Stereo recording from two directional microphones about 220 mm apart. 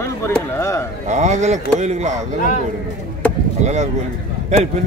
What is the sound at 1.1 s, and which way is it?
Speech, 30° right (ahead or behind).